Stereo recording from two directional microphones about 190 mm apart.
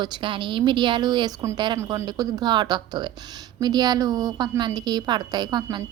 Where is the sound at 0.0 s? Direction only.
25° right (ahead or behind).